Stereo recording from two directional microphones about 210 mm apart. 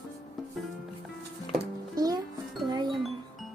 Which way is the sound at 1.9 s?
20° right (ahead or behind).